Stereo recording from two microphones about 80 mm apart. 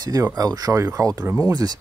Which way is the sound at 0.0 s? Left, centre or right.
Right.